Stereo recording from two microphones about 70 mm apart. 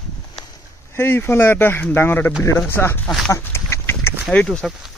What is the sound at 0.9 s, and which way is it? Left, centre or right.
Speech, left.